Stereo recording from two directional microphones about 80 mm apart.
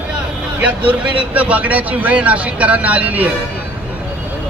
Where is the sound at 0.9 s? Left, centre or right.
Centre.